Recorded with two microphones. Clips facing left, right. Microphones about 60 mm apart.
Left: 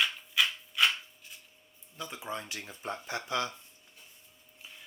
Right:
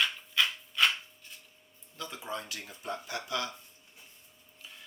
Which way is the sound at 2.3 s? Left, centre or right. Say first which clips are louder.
Even; left.